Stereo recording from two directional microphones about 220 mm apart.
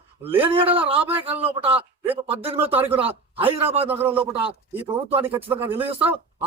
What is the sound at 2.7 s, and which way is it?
Speech, 10° right (ahead or behind).